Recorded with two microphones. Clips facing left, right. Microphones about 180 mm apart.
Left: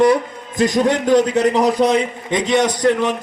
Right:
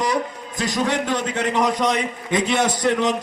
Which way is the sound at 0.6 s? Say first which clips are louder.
Left 6 dB; 45° left (ahead or behind).